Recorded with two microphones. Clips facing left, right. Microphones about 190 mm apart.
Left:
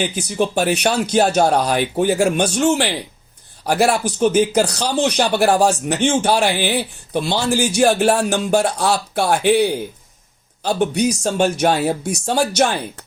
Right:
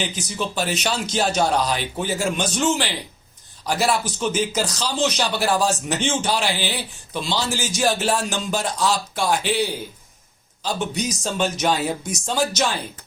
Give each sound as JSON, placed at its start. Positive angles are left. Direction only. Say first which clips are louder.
{"t": 0.0, "sound": "a man's voice", "louder": "left 7 dB", "side_deg": 50}
{"t": 12.1, "sound": "speech", "louder": "left 5 dB", "side_deg": 65}